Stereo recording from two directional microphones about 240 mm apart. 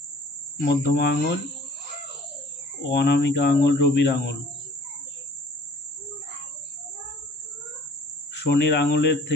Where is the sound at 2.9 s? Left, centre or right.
Left.